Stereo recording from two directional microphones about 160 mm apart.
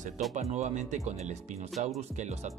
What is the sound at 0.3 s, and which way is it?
Speech, 45° right (ahead or behind).